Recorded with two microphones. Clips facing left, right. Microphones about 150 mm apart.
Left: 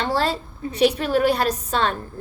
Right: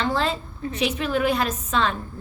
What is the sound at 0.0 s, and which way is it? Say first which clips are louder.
A woman's voice: left 1 dB; 35° left (ahead or behind).